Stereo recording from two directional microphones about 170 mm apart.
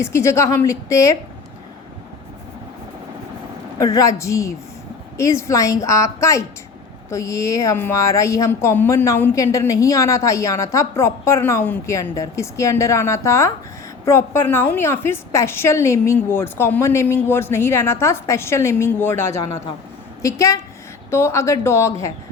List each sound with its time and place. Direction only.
0.0 s a woman's voice: 15° left (ahead or behind)
3.8 s a woman's voice: 20° left (ahead or behind)